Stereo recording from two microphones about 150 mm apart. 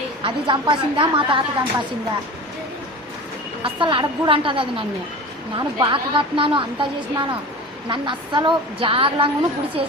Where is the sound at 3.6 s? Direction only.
35° right (ahead or behind).